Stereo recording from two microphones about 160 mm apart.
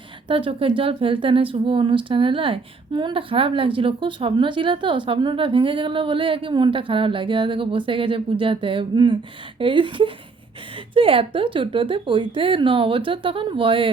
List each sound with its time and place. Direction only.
0.3 s speech: 35° right (ahead or behind)